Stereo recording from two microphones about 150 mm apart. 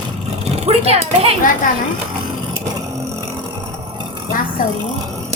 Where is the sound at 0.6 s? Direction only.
40° right (ahead or behind).